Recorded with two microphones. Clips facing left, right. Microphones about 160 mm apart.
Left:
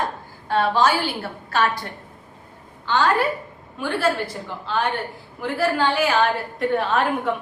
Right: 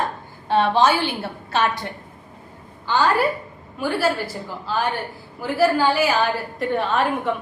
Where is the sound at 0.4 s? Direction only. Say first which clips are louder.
Right 2 dB; 25° right (ahead or behind).